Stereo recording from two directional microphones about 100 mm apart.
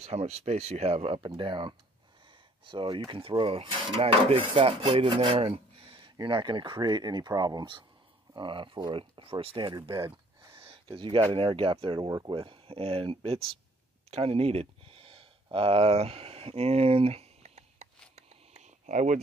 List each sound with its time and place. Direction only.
0.0 s speech: 90° right
1.2 s speech: 55° right (ahead or behind)
10.6 s a sound: 60° right (ahead or behind)
11.3 s speech: 60° right (ahead or behind)
14.1 s a sound: 90° right; by 15.2 s 70° right (ahead or behind)
15.5 s speech: 70° right (ahead or behind); by 17.5 s 90° right